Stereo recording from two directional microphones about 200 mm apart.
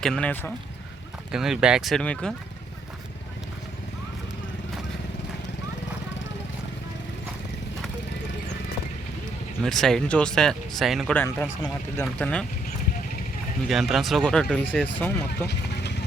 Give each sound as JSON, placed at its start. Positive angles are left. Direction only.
{"t": 0.0, "sound": "speech", "side_deg": 5}
{"t": 9.6, "sound": "speech", "side_deg": 0}
{"t": 13.7, "sound": "speech", "side_deg": 0}
{"t": 15.4, "sound": "vehicle", "side_deg": 55}